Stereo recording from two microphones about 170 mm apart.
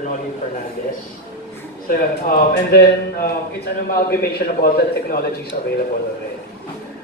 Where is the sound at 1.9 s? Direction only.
60° left (ahead or behind).